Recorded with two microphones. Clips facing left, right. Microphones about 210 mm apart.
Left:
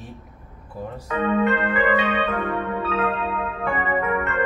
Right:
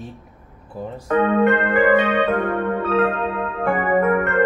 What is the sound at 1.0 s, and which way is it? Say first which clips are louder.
Keyboard: right 5 dB; 50° right (ahead or behind).